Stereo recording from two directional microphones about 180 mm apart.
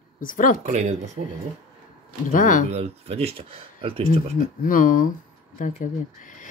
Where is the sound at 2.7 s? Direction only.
35° right (ahead or behind).